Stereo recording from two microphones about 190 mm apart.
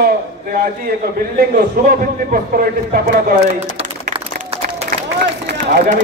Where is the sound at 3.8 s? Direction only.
30° right (ahead or behind).